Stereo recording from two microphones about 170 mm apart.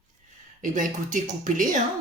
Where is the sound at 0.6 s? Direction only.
50° right (ahead or behind).